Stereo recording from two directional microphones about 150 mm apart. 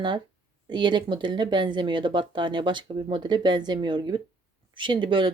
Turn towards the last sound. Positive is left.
turn(degrees=-35)  # may be behind; listen again after turning